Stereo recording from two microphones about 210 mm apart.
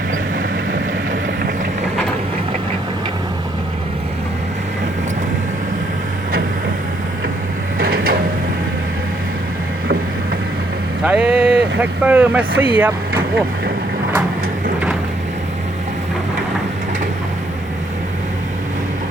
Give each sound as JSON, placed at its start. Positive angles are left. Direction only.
{"t": 7.8, "sound": "a sound", "side_deg": -45}
{"t": 11.0, "sound": "vehicle", "side_deg": -5}
{"t": 11.8, "sound": "speech", "side_deg": -5}